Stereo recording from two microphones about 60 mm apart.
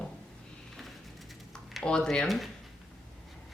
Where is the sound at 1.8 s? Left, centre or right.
Centre.